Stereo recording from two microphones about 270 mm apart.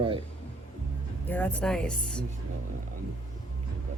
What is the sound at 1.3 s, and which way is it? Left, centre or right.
Speech, centre.